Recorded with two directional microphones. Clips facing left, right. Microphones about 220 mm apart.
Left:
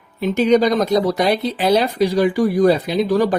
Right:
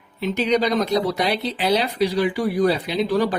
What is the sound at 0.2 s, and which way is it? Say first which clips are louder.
Speech: left 6 dB; 45° left (ahead or behind).